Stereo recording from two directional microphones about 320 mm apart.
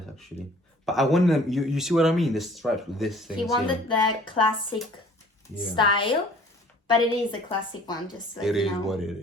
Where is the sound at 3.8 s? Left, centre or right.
Centre.